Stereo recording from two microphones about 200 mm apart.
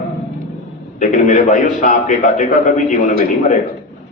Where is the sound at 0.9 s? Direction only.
40° left (ahead or behind).